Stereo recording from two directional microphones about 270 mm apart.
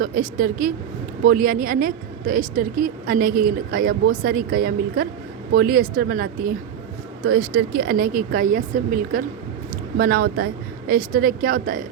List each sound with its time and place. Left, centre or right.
0.0 s speech: right